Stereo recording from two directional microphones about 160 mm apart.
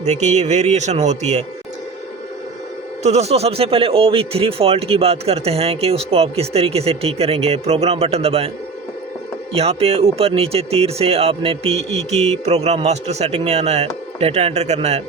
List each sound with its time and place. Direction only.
0.0 s speech: 45° right (ahead or behind)
3.0 s speech: 45° right (ahead or behind)
9.6 s speech: 40° right (ahead or behind)